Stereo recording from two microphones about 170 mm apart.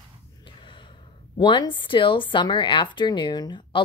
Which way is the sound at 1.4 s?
25° left (ahead or behind).